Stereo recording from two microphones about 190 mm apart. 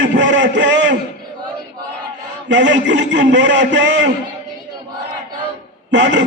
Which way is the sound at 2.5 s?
70° right (ahead or behind).